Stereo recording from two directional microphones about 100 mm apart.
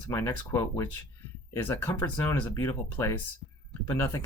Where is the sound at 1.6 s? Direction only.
20° left (ahead or behind).